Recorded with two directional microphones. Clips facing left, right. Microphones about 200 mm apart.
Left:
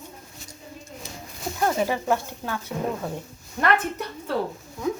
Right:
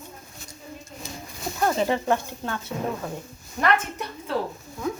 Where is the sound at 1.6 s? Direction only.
10° left (ahead or behind).